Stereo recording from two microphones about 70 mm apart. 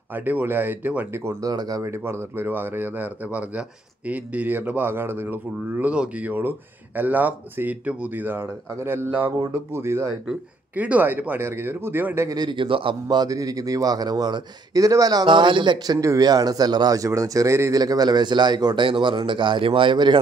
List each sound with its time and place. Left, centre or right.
0.1 s speech: right
1.5 s a man's voice: right
1.8 s speech: right
2.4 s speech: right
10.8 s speech: right
12.3 s a man's voice: right
16.2 s a man's voice: right
17.7 s a man's voice: right